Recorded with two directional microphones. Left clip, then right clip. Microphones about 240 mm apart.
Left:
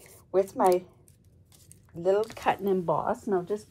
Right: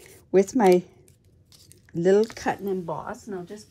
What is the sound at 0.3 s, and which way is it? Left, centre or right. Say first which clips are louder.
Speech: right 5 dB; right.